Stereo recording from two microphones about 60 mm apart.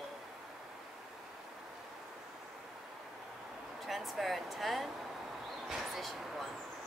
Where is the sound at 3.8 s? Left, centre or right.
Centre.